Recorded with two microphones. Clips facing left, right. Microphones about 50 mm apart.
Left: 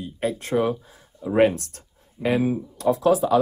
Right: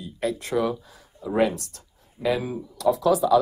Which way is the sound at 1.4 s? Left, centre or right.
Left.